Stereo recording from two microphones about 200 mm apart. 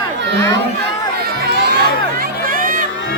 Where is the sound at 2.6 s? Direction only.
45° right (ahead or behind).